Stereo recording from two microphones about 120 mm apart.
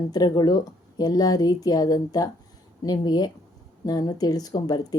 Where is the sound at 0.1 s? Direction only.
35° left (ahead or behind).